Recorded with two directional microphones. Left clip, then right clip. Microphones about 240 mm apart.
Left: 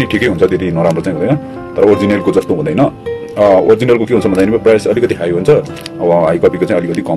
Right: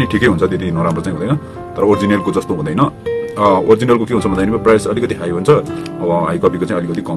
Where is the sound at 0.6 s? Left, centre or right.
Centre.